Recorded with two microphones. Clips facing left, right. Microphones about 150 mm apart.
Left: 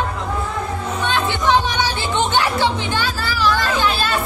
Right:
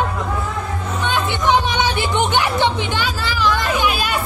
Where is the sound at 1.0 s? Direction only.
15° right (ahead or behind).